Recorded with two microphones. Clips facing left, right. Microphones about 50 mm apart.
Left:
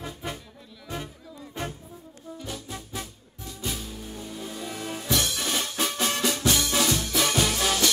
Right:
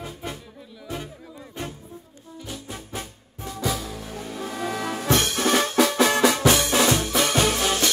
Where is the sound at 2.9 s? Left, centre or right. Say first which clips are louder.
Right 2 dB; right.